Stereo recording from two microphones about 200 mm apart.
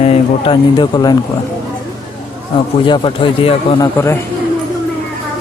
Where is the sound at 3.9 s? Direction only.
15° left (ahead or behind).